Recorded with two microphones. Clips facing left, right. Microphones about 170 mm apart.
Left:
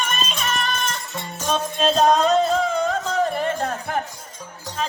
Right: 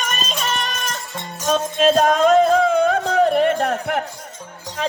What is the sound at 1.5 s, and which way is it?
Music, 45° right (ahead or behind).